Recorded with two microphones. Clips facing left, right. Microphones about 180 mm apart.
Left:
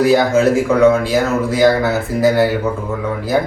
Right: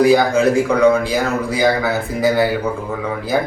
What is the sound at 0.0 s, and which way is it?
Speech, centre (ahead or behind).